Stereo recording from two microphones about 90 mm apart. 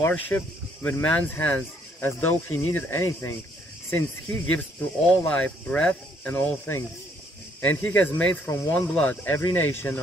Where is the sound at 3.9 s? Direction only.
15° left (ahead or behind).